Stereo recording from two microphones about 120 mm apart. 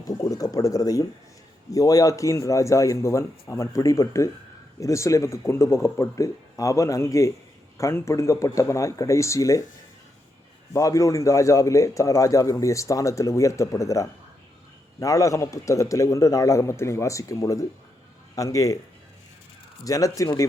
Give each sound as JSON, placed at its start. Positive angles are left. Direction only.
{"t": 0.0, "sound": "a man's voice", "side_deg": 30}
{"t": 10.8, "sound": "a man's voice", "side_deg": 30}
{"t": 19.8, "sound": "a man's voice", "side_deg": 30}